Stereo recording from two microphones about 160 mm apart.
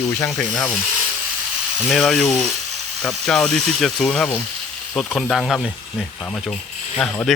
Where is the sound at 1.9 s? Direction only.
Centre (ahead or behind).